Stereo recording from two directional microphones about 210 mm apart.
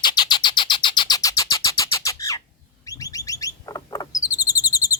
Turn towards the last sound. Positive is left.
turn(degrees=15)  # may be behind; listen again after turning